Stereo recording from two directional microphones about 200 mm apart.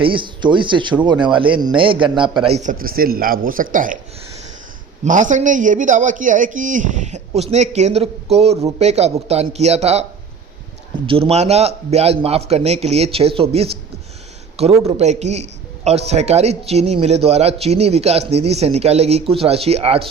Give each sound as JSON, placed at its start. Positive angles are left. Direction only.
{"t": 0.0, "sound": "a man's voice", "side_deg": -25}
{"t": 5.0, "sound": "speech", "side_deg": -40}